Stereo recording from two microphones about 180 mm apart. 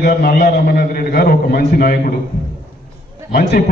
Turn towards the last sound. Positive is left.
turn(degrees=60)  # may be behind; listen again after turning